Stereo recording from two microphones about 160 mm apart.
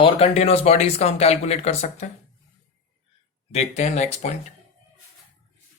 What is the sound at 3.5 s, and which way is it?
Speech, 45° left (ahead or behind).